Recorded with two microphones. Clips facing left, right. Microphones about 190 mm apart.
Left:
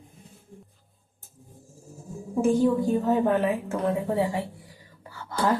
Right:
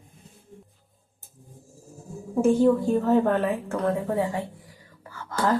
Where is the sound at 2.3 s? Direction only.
Centre (ahead or behind).